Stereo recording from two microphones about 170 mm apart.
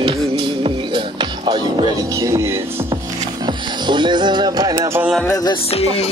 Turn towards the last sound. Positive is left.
turn(degrees=20)  # may be behind; listen again after turning